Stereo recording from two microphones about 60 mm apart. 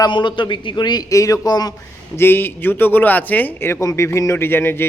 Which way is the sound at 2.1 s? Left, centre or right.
Left.